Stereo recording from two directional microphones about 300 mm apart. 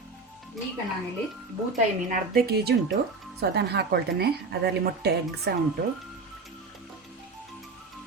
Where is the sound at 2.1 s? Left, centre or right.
Right.